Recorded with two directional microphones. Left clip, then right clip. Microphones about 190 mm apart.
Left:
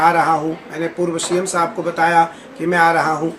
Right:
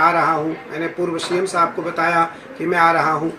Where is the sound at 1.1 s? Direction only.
25° left (ahead or behind).